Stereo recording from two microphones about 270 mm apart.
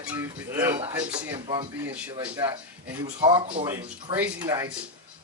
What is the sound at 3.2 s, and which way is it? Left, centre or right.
Speech, right.